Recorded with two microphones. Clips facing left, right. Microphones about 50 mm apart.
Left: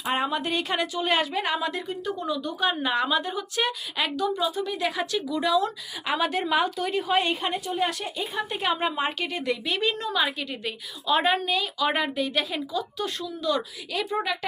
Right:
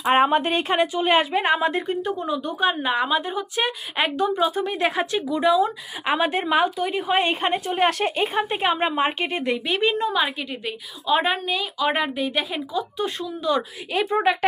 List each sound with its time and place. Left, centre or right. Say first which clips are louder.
0.0 s speech: right 8 dB; right
3.9 s speech: right 6 dB; right; by 7.0 s centre
7.1 s a woman's voice: right 5 dB; right
7.7 s speech: right 6 dB; right